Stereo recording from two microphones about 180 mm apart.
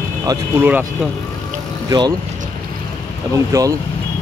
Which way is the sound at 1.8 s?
25° right (ahead or behind).